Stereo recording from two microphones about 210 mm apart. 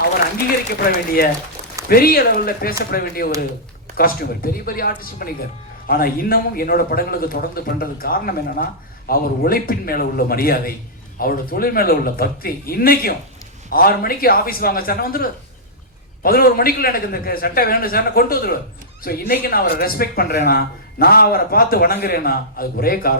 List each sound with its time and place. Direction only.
1.9 s a man's voice: 45° left (ahead or behind)